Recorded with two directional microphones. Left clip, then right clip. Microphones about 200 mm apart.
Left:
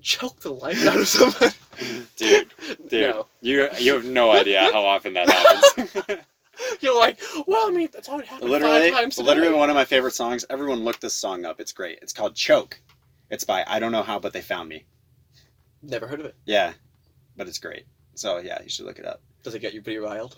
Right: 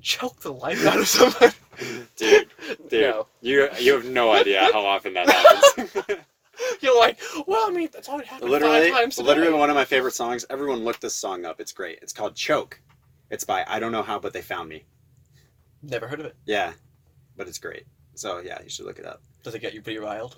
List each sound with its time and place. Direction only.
0.0 s speech: 15° left (ahead or behind)
1.7 s speech: 40° left (ahead or behind)
2.8 s a sound: 40° left (ahead or behind)
3.4 s speech: 45° left (ahead or behind)
5.2 s speech: 15° left (ahead or behind)
5.7 s a sound: 45° left (ahead or behind)
6.5 s speech: 20° left (ahead or behind)
8.7 s speech: 40° left (ahead or behind)
9.0 s speech: 15° left (ahead or behind)
9.2 s speech: 45° left (ahead or behind)
15.9 s speech: 15° left (ahead or behind)
16.5 s speech: 40° left (ahead or behind)
19.4 s speech: 15° left (ahead or behind)